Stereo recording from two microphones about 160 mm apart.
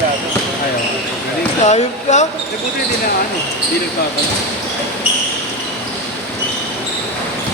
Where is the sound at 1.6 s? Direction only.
45° left (ahead or behind).